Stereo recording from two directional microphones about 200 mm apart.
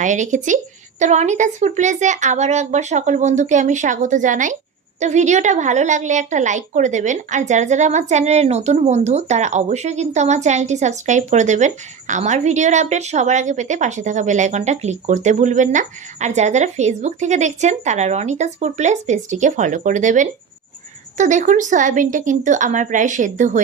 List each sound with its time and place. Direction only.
0.0 s a woman's voice: 40° right (ahead or behind)